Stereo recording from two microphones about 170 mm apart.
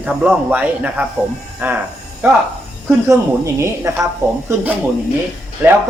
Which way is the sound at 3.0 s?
15° right (ahead or behind).